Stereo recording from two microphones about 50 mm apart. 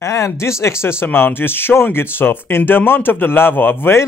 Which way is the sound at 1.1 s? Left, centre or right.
Left.